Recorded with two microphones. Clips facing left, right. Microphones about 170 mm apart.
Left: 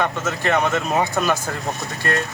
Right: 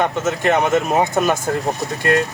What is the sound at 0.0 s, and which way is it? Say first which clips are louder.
Speech: right 4 dB; 20° right (ahead or behind).